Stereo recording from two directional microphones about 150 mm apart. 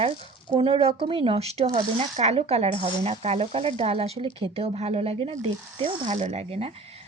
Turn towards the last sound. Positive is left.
turn(degrees=-40)  # may be behind; listen again after turning